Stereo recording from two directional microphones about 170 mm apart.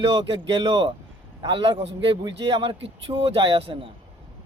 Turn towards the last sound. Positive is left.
turn(degrees=-30)  # may be behind; listen again after turning